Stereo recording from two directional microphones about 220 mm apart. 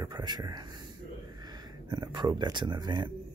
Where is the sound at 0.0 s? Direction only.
20° right (ahead or behind).